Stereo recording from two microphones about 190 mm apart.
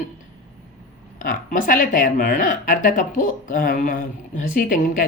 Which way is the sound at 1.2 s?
45° left (ahead or behind).